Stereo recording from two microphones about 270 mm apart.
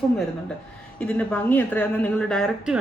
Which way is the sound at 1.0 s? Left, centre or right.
Centre.